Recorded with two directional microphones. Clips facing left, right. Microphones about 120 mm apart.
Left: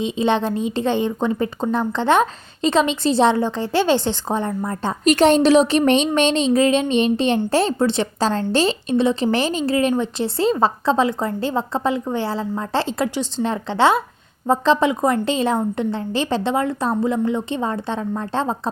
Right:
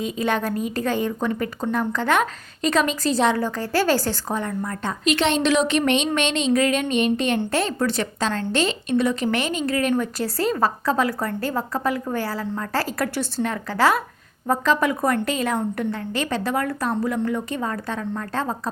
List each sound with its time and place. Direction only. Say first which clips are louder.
0.0 s a woman's voice: left 4 dB; 25° left (ahead or behind)
5.0 s a woman's voice: left 7 dB; 40° left (ahead or behind); by 18.7 s 25° left (ahead or behind)